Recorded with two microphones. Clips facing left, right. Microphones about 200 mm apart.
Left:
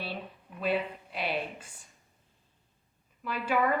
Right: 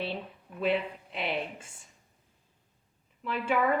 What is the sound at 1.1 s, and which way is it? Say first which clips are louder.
Speech: even; 25° right (ahead or behind).